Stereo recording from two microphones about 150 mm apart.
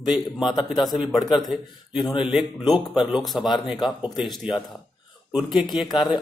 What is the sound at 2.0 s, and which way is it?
Speech, 35° left (ahead or behind).